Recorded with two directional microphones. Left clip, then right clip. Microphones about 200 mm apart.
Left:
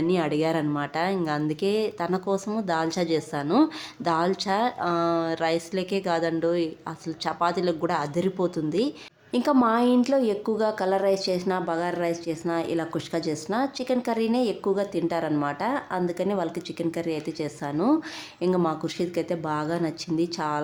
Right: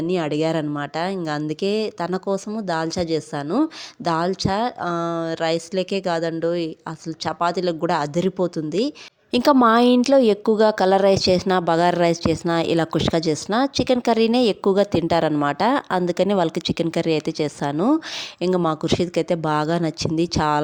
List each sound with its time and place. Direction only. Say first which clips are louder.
0.1 s speech: right 5 dB; 35° right (ahead or behind)
9.3 s a woman's voice: right 7 dB; 45° right (ahead or behind)